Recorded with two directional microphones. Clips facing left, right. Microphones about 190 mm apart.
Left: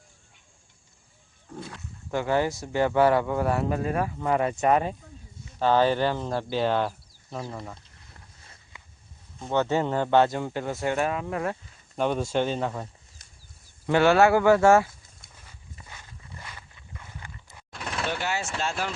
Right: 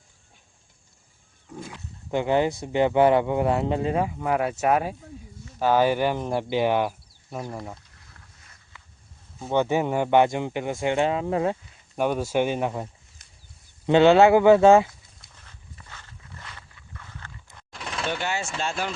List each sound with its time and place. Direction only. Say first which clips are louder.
1.5 s speech: right 1 dB; 15° right (ahead or behind)
4.2 s speech: even; 5° right (ahead or behind)
8.7 s a sound: even; 15° left (ahead or behind)
9.5 s speech: right 2 dB; 15° right (ahead or behind)
10.9 s speech: right 4 dB; 25° right (ahead or behind)
11.9 s speech: right 2 dB; 10° right (ahead or behind)
15.4 s dog: left 1 dB; 10° left (ahead or behind)